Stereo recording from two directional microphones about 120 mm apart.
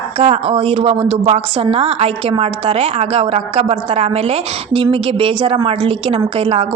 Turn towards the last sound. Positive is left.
turn(degrees=-50)  # may be behind; listen again after turning